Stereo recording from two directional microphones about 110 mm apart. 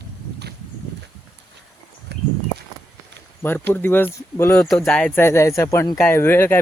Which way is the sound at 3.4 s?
20° left (ahead or behind).